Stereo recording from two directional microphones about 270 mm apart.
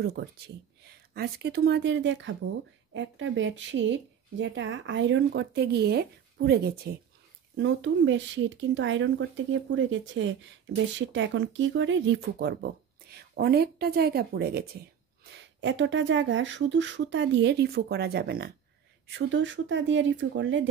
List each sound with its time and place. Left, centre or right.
0.2 s speech: right